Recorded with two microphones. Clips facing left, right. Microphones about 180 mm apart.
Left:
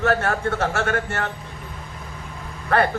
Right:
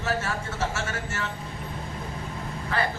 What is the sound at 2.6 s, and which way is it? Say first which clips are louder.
Speech: left 8 dB; 60° left (ahead or behind).